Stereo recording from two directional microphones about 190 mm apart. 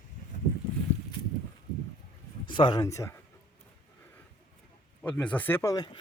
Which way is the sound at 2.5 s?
25° left (ahead or behind).